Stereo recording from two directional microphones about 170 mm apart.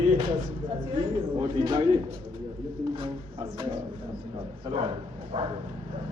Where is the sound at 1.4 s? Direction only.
30° right (ahead or behind).